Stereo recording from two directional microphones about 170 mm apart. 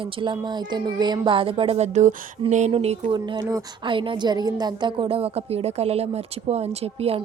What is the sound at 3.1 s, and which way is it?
A woman's voice, 25° right (ahead or behind).